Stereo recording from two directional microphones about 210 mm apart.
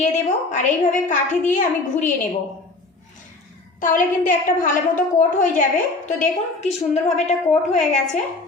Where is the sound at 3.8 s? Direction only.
40° left (ahead or behind).